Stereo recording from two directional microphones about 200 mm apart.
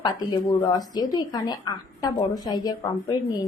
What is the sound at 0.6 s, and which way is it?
A woman's voice, 20° left (ahead or behind).